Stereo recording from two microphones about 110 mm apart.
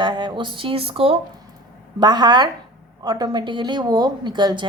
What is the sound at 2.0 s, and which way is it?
A woman's voice, 40° right (ahead or behind).